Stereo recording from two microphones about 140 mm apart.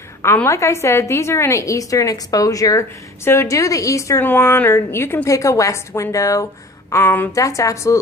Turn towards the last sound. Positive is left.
turn(degrees=20)  # may be behind; listen again after turning